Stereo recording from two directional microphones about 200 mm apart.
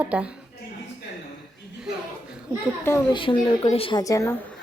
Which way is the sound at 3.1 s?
25° left (ahead or behind).